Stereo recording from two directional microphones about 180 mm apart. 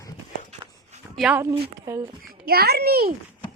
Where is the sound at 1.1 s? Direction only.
5° right (ahead or behind).